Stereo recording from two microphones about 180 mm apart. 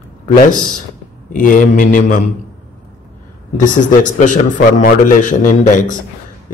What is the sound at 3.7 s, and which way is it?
A man's voice, 45° left (ahead or behind).